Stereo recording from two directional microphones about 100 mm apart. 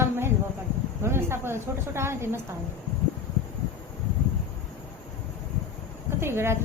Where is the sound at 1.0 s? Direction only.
25° right (ahead or behind).